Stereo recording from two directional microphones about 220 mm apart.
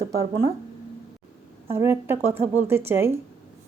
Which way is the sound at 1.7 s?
10° right (ahead or behind).